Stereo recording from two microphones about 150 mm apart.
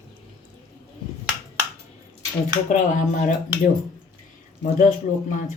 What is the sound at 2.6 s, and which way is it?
Speech, 55° left (ahead or behind).